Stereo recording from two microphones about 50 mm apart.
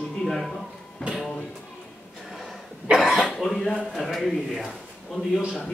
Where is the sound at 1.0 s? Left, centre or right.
Centre.